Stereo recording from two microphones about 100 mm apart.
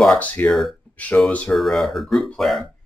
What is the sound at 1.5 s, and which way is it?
Speech, centre (ahead or behind).